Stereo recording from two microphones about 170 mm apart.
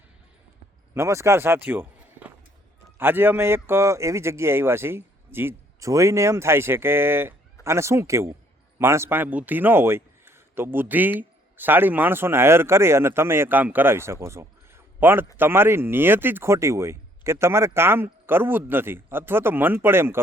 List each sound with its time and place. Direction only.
0.9 s speech: 15° right (ahead or behind)